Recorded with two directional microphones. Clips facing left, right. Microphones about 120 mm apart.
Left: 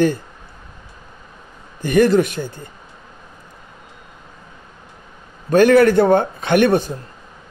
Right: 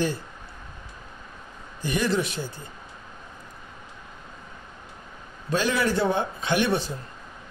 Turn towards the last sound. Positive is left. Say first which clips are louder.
# left 9 dB
turn(degrees=50)  # may be behind; listen again after turning